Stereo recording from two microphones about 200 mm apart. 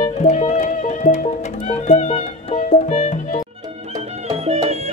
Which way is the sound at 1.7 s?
35° left (ahead or behind).